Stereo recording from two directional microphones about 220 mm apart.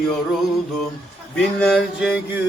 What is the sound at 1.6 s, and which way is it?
Speech, centre (ahead or behind).